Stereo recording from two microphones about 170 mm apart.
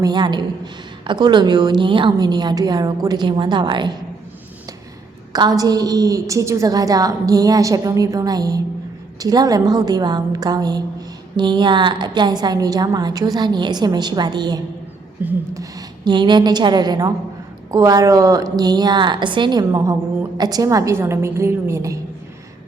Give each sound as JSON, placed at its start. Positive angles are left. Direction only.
{"t": 0.0, "sound": "a woman's voice", "side_deg": -25}
{"t": 5.3, "sound": "a woman's voice", "side_deg": -20}
{"t": 15.2, "sound": "a woman's voice", "side_deg": -10}
{"t": 16.0, "sound": "a woman's voice", "side_deg": -25}